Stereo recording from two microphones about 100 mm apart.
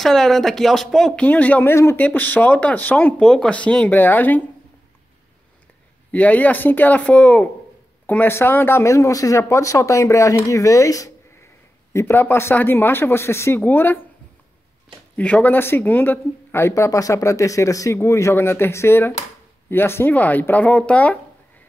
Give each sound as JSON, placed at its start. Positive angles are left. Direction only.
{"t": 0.0, "sound": "speech", "side_deg": 5}
{"t": 1.2, "sound": "speech", "side_deg": 15}
{"t": 6.1, "sound": "speech", "side_deg": 15}
{"t": 15.1, "sound": "speech", "side_deg": 15}